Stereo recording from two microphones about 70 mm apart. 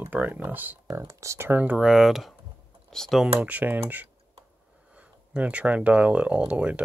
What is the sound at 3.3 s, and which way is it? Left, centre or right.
Speech, right.